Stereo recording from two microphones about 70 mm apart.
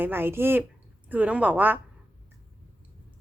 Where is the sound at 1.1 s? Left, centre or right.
Right.